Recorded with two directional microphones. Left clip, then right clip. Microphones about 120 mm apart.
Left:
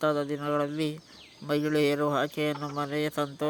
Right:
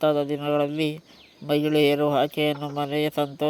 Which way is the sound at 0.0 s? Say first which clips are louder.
Right 5 dB; 20° right (ahead or behind).